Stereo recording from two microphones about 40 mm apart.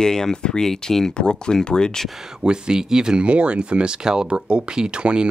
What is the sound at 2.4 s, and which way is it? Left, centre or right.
Speech, right.